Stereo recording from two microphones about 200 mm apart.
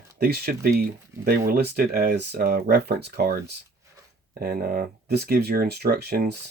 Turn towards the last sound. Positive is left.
turn(degrees=-50)  # may be behind; listen again after turning